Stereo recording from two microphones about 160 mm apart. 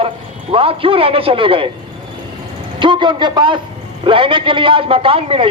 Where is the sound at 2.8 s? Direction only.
30° right (ahead or behind).